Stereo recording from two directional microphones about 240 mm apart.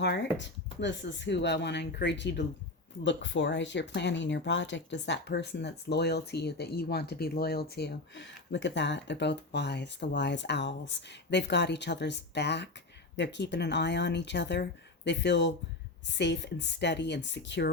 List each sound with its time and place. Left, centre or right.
0.0 s speech: left